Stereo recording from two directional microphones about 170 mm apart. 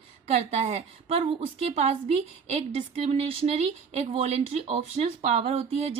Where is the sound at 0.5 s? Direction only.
40° right (ahead or behind).